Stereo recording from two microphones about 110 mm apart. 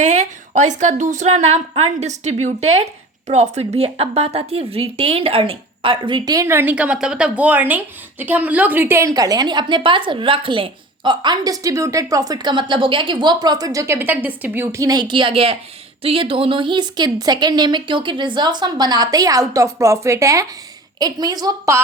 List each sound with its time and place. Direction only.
0.0 s a woman's voice: 90° right; by 6.3 s 45° right (ahead or behind)
6.3 s a woman's voice: 25° right (ahead or behind)